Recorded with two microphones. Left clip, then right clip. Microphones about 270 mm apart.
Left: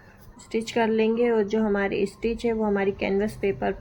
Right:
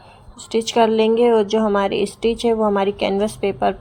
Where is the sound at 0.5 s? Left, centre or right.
Centre.